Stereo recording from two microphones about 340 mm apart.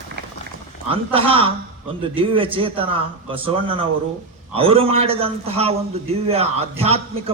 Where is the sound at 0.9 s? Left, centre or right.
Centre.